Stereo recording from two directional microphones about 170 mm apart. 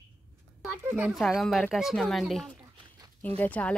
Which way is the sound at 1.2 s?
Centre (ahead or behind).